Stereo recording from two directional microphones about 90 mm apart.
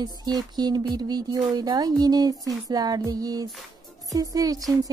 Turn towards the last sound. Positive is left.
turn(degrees=-40)  # may be behind; listen again after turning